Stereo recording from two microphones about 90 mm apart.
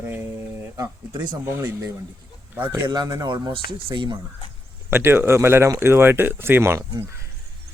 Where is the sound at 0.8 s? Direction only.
55° right (ahead or behind).